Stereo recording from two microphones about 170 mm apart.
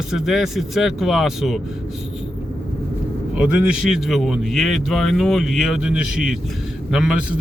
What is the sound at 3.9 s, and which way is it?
Speech, centre (ahead or behind).